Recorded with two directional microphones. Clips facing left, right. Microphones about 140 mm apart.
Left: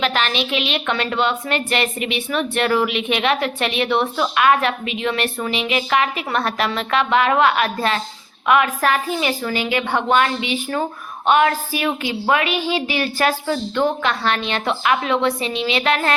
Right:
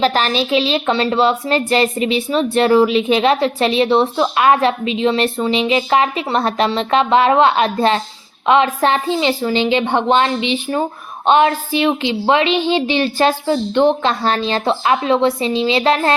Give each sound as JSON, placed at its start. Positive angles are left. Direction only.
{"t": 0.0, "sound": "a woman's voice", "side_deg": -35}